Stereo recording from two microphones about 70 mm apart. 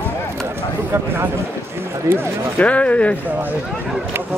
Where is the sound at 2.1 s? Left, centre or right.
Right.